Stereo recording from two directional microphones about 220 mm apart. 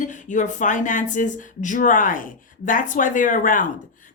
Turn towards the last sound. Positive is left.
turn(degrees=35)  # may be behind; listen again after turning